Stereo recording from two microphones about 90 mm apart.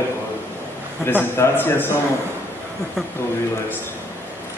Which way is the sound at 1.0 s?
25° left (ahead or behind).